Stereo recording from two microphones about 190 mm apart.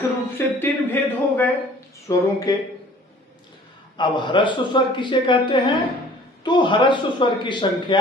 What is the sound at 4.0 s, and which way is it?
A man's voice, 25° left (ahead or behind).